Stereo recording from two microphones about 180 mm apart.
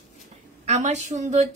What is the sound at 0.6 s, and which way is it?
Speech, 40° right (ahead or behind).